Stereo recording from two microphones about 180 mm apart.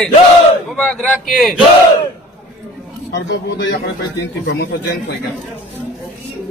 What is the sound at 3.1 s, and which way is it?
Speech, 75° left (ahead or behind).